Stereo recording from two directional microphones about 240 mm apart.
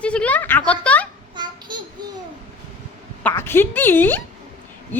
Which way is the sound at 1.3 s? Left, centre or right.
Centre.